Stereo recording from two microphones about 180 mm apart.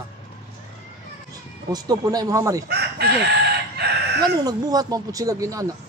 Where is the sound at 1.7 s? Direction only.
20° right (ahead or behind).